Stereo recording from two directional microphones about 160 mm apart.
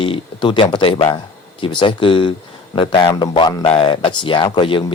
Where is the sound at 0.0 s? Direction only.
30° left (ahead or behind).